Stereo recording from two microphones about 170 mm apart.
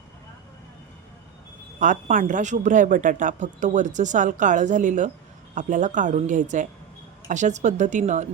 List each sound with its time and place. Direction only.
1.8 s speech: 50° right (ahead or behind)